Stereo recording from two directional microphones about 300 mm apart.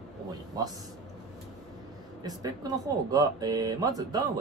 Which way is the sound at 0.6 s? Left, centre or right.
Centre.